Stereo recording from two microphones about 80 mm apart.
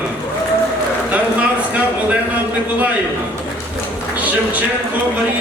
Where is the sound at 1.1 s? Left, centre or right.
Centre.